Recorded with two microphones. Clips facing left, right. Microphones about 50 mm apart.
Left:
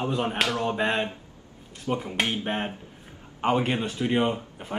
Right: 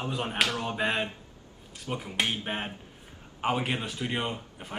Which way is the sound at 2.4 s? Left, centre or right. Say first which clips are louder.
Left 5 dB; centre.